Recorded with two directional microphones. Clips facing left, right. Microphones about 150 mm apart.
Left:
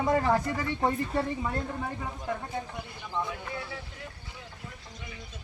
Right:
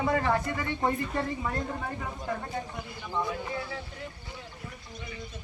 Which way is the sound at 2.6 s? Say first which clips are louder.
Even; 20° left (ahead or behind).